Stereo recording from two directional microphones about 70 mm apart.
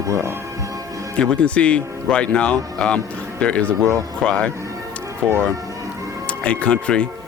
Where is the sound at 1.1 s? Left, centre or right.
Centre.